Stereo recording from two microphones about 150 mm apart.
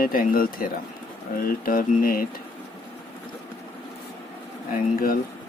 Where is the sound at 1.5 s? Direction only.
70° left (ahead or behind).